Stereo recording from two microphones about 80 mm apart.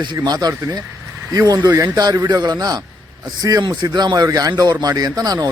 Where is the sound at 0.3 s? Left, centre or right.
Right.